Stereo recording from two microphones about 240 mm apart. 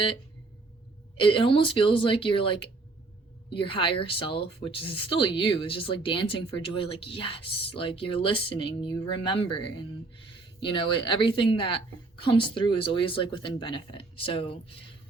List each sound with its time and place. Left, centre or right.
1.1 s speech: left